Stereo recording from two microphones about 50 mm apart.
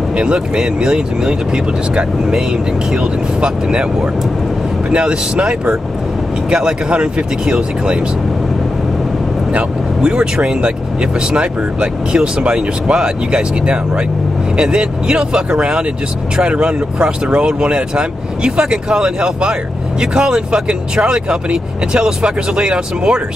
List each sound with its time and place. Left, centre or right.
0.1 s speech: centre
9.5 s speech: centre